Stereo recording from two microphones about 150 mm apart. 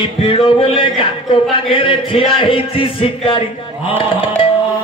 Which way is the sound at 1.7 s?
35° left (ahead or behind).